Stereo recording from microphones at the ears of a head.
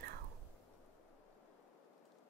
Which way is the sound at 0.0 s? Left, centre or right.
Right.